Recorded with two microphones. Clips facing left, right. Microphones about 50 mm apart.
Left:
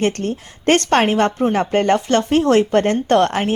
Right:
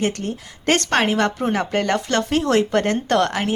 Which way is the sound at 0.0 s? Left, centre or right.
Left.